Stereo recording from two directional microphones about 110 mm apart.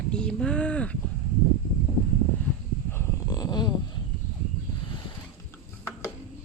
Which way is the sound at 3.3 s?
40° left (ahead or behind).